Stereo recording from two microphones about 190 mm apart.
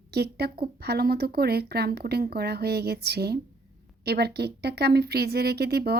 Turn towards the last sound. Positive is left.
turn(degrees=-55)  # may be behind; listen again after turning